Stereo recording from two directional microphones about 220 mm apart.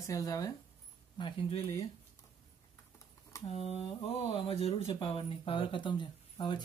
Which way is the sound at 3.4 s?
30° left (ahead or behind).